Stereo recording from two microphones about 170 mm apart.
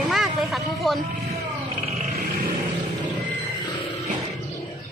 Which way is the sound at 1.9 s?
45° right (ahead or behind).